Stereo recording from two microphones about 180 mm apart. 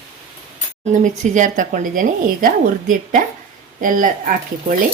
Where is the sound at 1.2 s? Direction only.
45° right (ahead or behind).